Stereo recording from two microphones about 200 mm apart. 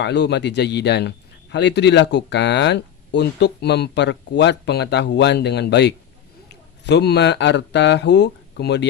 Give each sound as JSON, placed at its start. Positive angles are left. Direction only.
{"t": 0.0, "sound": "speech", "side_deg": 60}